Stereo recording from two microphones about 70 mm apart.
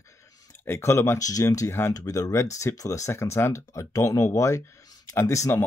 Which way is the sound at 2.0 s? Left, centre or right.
Left.